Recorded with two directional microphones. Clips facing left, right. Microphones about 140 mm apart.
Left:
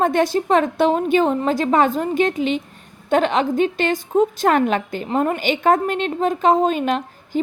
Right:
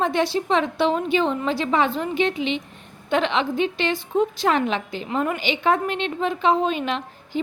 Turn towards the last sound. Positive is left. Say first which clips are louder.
# left 5 dB
turn(degrees=45)  # may be behind; listen again after turning